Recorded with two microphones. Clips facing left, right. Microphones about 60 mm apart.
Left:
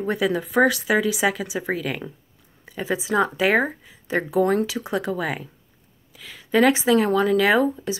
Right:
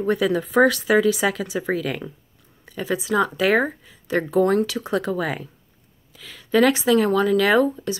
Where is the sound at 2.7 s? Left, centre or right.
Left.